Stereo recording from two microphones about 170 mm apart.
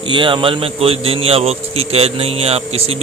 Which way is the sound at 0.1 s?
30° right (ahead or behind).